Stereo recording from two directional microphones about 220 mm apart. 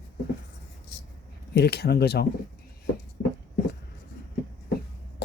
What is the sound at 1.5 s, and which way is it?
Speech, 45° left (ahead or behind).